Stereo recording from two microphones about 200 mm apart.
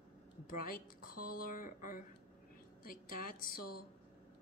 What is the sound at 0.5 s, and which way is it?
A woman's voice, 45° left (ahead or behind).